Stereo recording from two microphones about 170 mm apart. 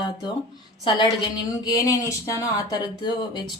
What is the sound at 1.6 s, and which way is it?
Speech, 20° left (ahead or behind).